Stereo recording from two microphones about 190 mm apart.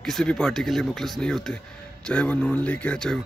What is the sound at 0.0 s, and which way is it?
A man's voice, 5° left (ahead or behind).